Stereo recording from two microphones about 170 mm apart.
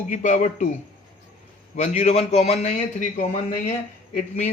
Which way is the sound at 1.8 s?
40° left (ahead or behind).